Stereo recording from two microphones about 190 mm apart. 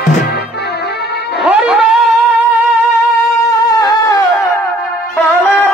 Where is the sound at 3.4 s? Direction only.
20° left (ahead or behind).